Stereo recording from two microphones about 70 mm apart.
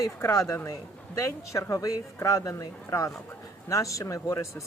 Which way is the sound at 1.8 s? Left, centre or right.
Left.